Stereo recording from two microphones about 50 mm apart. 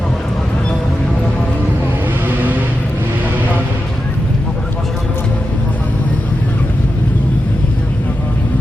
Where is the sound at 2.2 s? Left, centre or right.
Right.